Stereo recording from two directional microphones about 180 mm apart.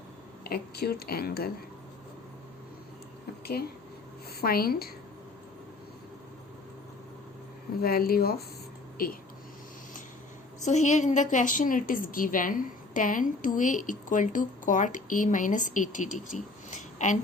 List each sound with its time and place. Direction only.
0.4 s speech: 60° left (ahead or behind)
4.4 s speech: 55° left (ahead or behind)
7.8 s speech: 55° left (ahead or behind)
10.7 s a woman's voice: 40° left (ahead or behind)
16.6 s a sound: 40° left (ahead or behind)